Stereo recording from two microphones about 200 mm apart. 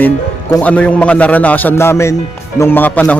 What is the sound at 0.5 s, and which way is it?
A man's voice, 5° left (ahead or behind).